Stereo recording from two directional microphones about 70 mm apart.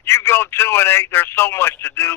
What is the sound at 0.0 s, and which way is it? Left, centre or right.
A man's voice, left.